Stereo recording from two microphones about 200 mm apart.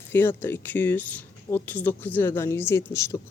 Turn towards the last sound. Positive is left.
turn(degrees=15)  # may be behind; listen again after turning